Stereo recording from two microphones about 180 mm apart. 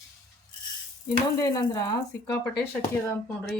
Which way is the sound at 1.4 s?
20° left (ahead or behind).